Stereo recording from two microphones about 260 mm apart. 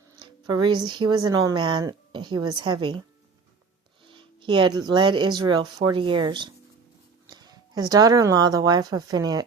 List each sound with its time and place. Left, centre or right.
0.2 s speech: centre
4.0 s speech: centre